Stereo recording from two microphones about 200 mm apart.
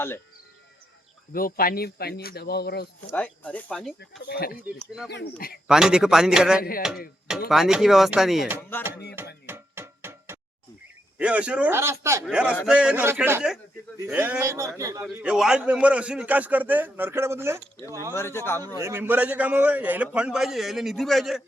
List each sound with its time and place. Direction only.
1.3 s speech: 45° left (ahead or behind)
3.1 s speech: 5° left (ahead or behind)
4.3 s speech: 50° left (ahead or behind)
5.6 s speech: 5° right (ahead or behind)
6.6 s speech: 45° left (ahead or behind)
7.3 s speech: centre (ahead or behind)
9.1 s music: 10° right (ahead or behind)
11.2 s a man's voice: 5° right (ahead or behind)
15.1 s a man's voice: 5° right (ahead or behind)
18.1 s speech: 10° left (ahead or behind)
18.8 s a man's voice: 10° right (ahead or behind)